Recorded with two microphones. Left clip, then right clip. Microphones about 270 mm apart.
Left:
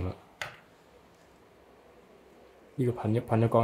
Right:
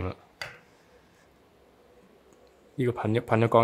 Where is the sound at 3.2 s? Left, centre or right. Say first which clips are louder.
Right 5 dB; right.